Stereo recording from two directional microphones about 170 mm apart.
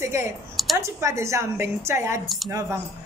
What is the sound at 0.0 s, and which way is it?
A woman's voice, 15° right (ahead or behind).